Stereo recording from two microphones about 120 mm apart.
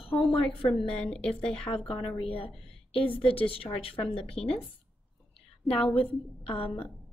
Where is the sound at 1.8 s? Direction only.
50° left (ahead or behind).